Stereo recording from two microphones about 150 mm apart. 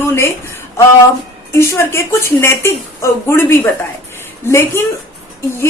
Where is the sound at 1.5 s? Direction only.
15° left (ahead or behind).